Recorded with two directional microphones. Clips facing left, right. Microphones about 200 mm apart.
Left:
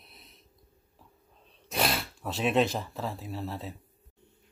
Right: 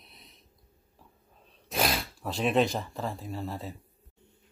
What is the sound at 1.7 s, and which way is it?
Speech, centre (ahead or behind).